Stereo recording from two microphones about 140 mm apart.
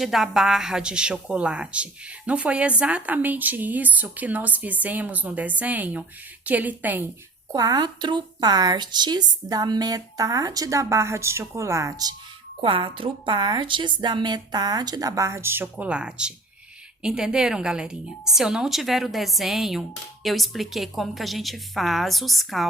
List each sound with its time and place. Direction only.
0.0 s speech: centre (ahead or behind)
7.5 s a woman's voice: 30° right (ahead or behind)
12.6 s a woman's voice: 40° right (ahead or behind); by 22.6 s centre (ahead or behind)